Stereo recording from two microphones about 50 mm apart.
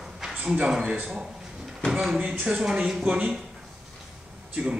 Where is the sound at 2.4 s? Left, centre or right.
Centre.